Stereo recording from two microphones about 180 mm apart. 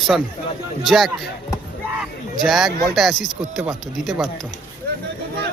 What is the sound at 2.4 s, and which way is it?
Speech, centre (ahead or behind).